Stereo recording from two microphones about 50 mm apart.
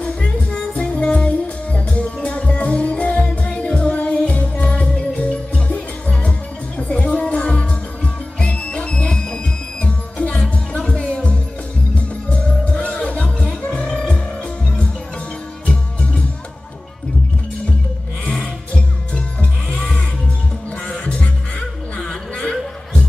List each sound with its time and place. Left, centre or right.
0.0 s music: left
12.3 s music: left
19.7 s music: centre
20.9 s music: left